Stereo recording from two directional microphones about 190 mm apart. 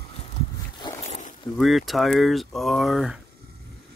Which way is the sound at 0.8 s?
35° left (ahead or behind).